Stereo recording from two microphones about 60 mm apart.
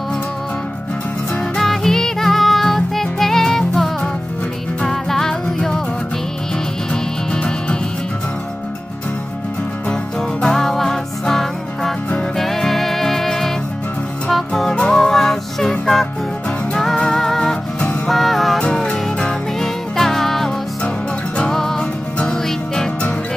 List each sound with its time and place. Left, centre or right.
1.6 s music: centre
10.4 s music: centre
16.7 s music: centre
18.6 s music: centre